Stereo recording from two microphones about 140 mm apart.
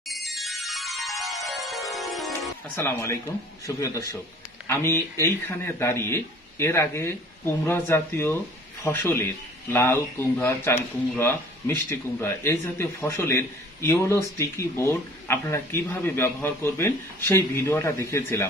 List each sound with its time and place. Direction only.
0.1 s music: centre (ahead or behind)
2.7 s speech: 15° left (ahead or behind)